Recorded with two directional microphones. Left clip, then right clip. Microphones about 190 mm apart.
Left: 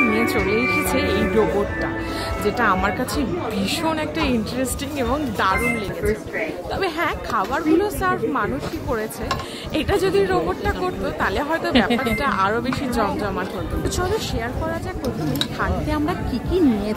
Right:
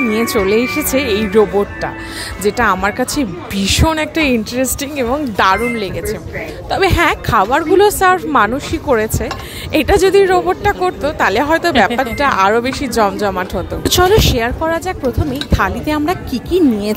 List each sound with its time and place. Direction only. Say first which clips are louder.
0.1 s a woman's voice: right 6 dB; 40° right (ahead or behind)
2.4 s a woman's voice: right 6 dB; 35° right (ahead or behind)
6.7 s a woman's voice: right 12 dB; 40° right (ahead or behind)